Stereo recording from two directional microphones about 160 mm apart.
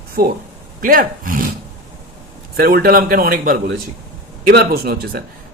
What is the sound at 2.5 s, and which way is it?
A man's voice, 70° right (ahead or behind).